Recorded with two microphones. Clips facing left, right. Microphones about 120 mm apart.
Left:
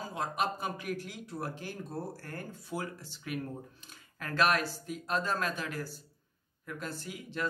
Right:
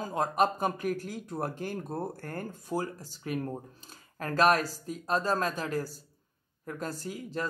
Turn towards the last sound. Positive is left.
turn(degrees=-40)  # may be behind; listen again after turning